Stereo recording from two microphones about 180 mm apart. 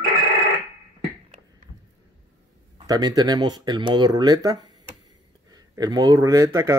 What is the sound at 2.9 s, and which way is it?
Speech, 20° right (ahead or behind).